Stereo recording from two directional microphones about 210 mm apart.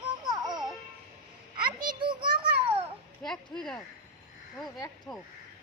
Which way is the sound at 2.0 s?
20° right (ahead or behind).